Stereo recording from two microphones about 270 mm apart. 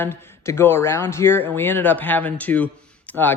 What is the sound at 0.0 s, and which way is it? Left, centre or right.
A man's voice, centre.